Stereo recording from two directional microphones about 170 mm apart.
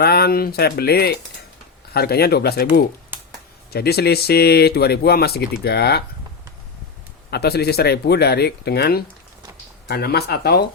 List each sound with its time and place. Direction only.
0.0 s speech: 65° left (ahead or behind)
7.3 s speech: 70° left (ahead or behind)